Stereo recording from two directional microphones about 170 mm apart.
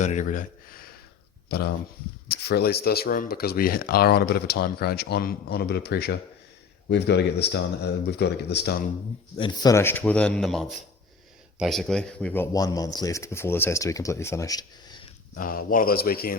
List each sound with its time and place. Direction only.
0.0 s speech: 45° left (ahead or behind)
1.5 s speech: 65° left (ahead or behind)
6.8 s speech: 90° left; by 8.8 s 75° left (ahead or behind)
9.4 s speech: 25° left (ahead or behind)
15.4 s a man's voice: 55° left (ahead or behind)